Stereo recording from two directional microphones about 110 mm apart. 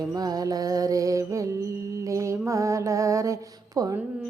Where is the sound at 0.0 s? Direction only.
35° right (ahead or behind).